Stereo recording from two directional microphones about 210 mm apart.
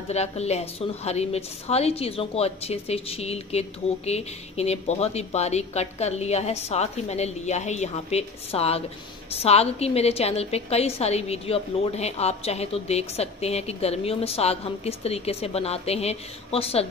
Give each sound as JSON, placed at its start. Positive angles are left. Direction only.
{"t": 0.1, "sound": "a woman's voice", "side_deg": 30}